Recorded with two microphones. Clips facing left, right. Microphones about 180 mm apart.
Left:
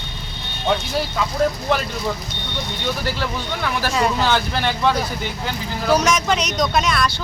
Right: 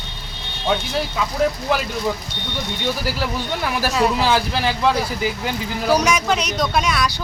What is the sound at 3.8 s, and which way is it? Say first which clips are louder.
Speech: right 1 dB; 5° right (ahead or behind).